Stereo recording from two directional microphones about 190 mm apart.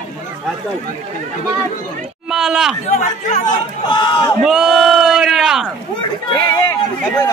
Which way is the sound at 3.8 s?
25° left (ahead or behind).